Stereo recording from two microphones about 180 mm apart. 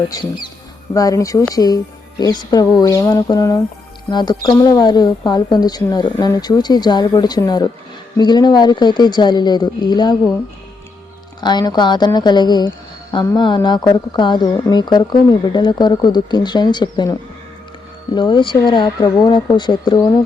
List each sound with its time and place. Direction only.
0.1 s speech: 20° left (ahead or behind)
11.3 s speech: 25° left (ahead or behind)